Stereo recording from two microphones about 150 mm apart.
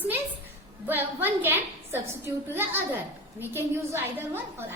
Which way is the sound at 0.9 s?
15° right (ahead or behind).